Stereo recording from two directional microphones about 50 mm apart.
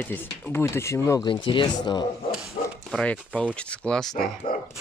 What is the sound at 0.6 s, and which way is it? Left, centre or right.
Speech, left.